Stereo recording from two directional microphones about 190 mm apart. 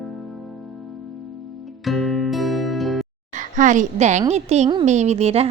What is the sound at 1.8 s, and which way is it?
Music, centre (ahead or behind).